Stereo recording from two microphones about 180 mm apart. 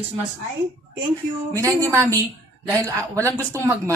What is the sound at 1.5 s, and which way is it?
A woman's voice, 20° right (ahead or behind).